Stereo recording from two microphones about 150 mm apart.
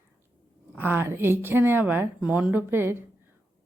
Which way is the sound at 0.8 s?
15° right (ahead or behind).